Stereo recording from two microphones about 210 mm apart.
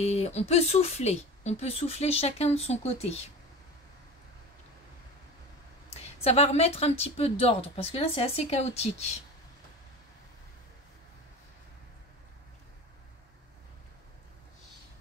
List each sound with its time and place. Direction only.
0.0 s speech: 30° left (ahead or behind)
5.9 s speech: 30° left (ahead or behind)